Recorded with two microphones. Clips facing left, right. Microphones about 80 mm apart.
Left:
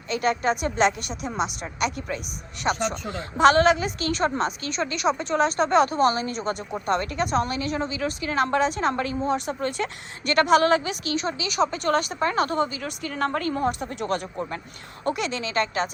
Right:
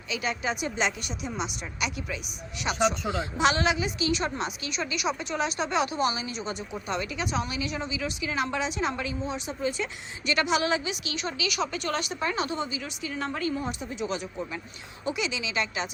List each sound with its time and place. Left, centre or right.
0.1 s a woman's voice: left